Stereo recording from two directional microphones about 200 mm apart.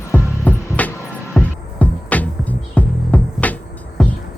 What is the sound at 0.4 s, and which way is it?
Music, 10° left (ahead or behind).